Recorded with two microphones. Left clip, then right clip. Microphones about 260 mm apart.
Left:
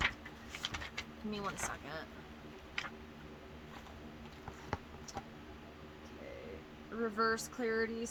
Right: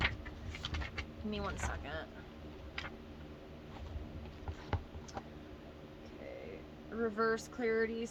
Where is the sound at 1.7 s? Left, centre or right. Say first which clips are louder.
Right 1 dB; centre.